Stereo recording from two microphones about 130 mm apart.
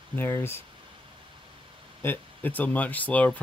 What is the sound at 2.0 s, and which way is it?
Speech, 15° left (ahead or behind).